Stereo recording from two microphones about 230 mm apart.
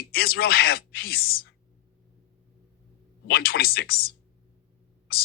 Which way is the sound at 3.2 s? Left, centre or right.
Left.